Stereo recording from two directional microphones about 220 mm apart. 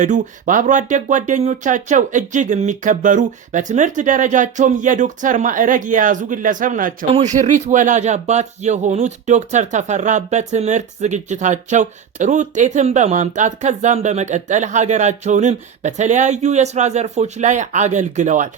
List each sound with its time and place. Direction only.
0.0 s speech: 35° right (ahead or behind)